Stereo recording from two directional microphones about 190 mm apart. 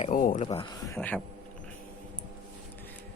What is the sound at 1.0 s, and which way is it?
Speech, 5° left (ahead or behind).